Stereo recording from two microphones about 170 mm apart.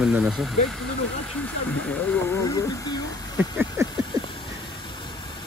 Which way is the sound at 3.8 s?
15° right (ahead or behind).